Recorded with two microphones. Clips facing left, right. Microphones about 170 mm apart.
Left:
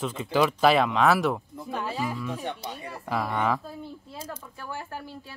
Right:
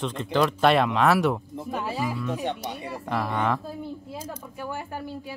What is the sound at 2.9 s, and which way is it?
Speech, centre (ahead or behind).